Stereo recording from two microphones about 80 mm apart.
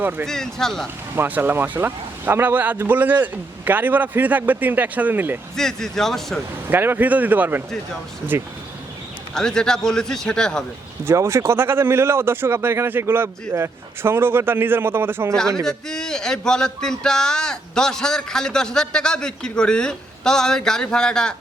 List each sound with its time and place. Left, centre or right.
0.0 s a man's voice: right
0.3 s speech: centre
1.1 s a man's voice: right
5.5 s speech: centre
6.7 s a man's voice: right
9.3 s speech: centre
11.0 s a man's voice: right
15.6 s speech: centre